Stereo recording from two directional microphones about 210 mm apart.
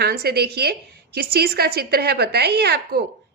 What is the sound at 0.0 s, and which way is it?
A woman's voice, 50° right (ahead or behind).